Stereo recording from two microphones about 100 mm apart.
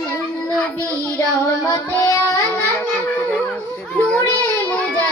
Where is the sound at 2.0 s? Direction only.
35° left (ahead or behind).